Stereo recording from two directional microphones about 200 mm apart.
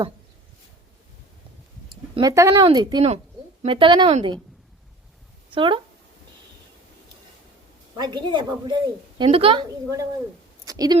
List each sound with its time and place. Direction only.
2.1 s a woman's voice: 15° right (ahead or behind)
5.5 s a woman's voice: 25° right (ahead or behind)
7.9 s a woman's voice: 20° right (ahead or behind)
10.7 s a sound: 20° right (ahead or behind)